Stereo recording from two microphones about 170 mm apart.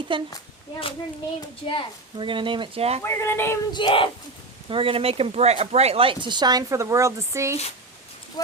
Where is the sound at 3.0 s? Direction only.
15° left (ahead or behind).